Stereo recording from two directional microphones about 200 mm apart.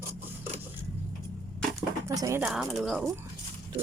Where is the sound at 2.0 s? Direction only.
15° right (ahead or behind).